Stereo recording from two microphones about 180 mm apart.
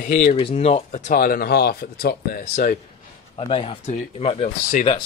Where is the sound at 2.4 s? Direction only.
40° left (ahead or behind).